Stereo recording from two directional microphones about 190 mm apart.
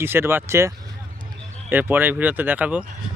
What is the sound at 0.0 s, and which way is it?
Speech, 10° right (ahead or behind).